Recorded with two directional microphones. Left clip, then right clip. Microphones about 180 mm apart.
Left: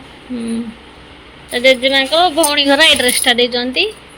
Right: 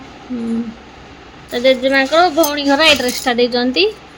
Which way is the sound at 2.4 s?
Centre (ahead or behind).